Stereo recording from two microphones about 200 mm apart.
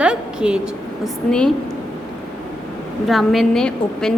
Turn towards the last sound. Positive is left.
turn(degrees=5)  # may be behind; listen again after turning